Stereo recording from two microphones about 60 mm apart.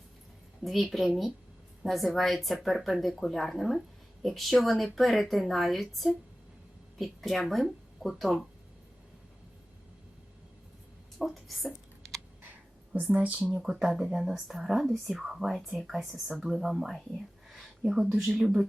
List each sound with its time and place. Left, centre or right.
0.6 s speech: centre
11.2 s speech: centre
12.9 s a woman's voice: right
13.6 s speech: centre